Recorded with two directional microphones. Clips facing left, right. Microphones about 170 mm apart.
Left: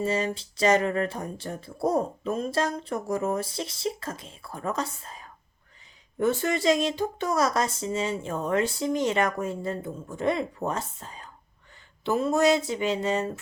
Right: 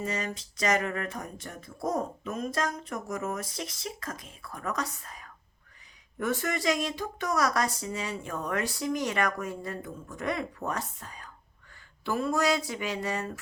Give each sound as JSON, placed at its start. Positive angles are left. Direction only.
{"t": 0.0, "sound": "speech", "side_deg": 30}